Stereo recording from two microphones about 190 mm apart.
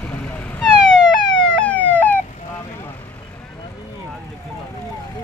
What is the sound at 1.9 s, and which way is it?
Police car, 10° left (ahead or behind).